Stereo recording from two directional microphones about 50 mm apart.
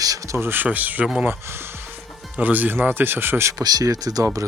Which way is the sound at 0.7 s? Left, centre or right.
Right.